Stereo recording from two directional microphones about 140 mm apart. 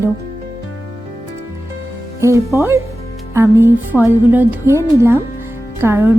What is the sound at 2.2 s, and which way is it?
A woman's voice, 20° right (ahead or behind).